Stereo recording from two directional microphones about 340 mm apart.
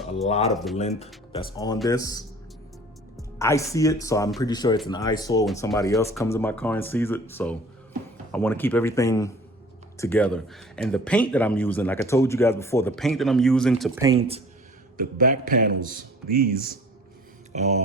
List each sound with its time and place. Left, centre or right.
0.3 s speech: centre
0.5 s speech: centre
0.8 s a man's voice: centre